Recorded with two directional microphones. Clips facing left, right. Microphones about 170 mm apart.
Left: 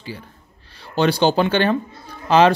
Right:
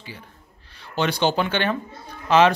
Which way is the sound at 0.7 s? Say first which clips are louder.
Left 5 dB; 35° left (ahead or behind).